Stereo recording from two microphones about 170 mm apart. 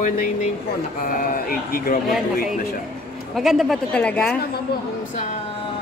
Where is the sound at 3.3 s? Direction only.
Centre (ahead or behind).